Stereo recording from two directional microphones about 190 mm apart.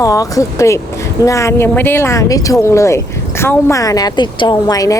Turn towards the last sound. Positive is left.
turn(degrees=20)  # may be behind; listen again after turning